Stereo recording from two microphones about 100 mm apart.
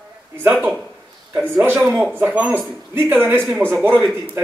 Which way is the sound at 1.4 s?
25° right (ahead or behind).